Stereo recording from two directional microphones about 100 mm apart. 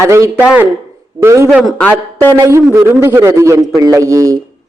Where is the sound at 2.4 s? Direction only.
30° right (ahead or behind).